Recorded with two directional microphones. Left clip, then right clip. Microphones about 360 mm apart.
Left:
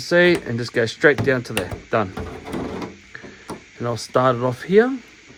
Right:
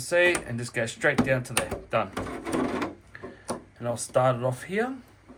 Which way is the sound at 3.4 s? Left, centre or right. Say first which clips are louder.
Left 4 dB; left.